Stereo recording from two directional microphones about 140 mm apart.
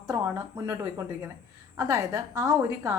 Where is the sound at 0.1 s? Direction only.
25° right (ahead or behind).